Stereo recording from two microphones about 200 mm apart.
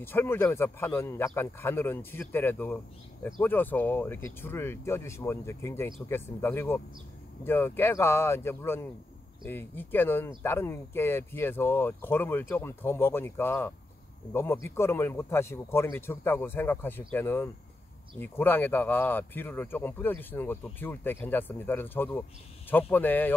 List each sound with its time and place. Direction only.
0.0 s speech: 10° left (ahead or behind)